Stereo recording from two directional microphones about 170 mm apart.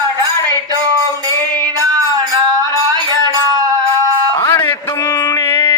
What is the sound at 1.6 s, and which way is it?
Music, 20° right (ahead or behind).